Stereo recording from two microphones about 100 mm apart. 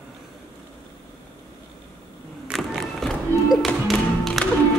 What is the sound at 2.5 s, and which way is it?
Music, centre (ahead or behind).